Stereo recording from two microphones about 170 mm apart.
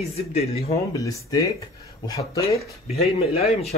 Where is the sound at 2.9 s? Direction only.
35° left (ahead or behind).